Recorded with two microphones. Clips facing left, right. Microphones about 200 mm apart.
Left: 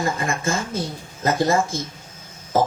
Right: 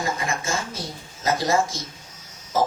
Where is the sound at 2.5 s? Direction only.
55° left (ahead or behind).